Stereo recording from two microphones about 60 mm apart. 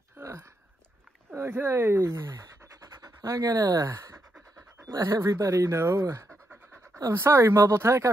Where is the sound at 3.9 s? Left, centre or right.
Right.